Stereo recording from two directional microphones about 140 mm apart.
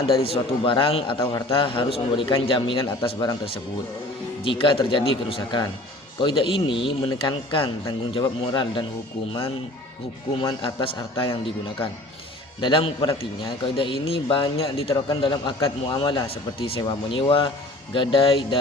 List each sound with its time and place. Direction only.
0.3 s a man's voice: 40° left (ahead or behind)
4.4 s a man's voice: 40° left (ahead or behind)
10.6 s a man's voice: 35° left (ahead or behind)
12.5 s a man's voice: 35° left (ahead or behind)